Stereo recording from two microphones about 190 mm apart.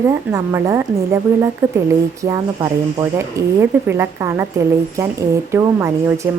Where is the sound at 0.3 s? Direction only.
15° right (ahead or behind).